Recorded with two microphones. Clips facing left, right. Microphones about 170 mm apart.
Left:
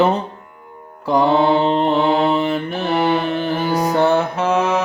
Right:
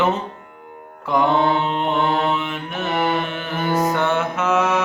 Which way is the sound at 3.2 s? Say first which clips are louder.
Left 6 dB; 35° left (ahead or behind).